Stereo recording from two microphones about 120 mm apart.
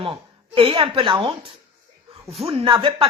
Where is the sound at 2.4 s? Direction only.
45° right (ahead or behind).